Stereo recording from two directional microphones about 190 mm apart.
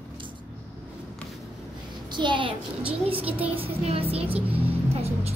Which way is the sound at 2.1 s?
25° right (ahead or behind).